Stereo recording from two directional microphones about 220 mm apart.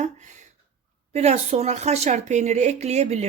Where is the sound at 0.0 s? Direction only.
35° right (ahead or behind).